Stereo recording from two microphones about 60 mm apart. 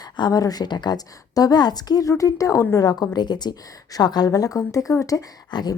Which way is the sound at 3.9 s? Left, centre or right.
Left.